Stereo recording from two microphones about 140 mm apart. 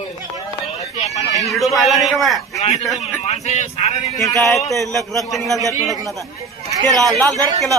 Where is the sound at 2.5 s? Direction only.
50° left (ahead or behind).